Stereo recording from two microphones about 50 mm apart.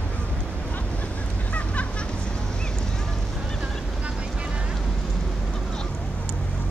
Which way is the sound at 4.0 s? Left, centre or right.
Right.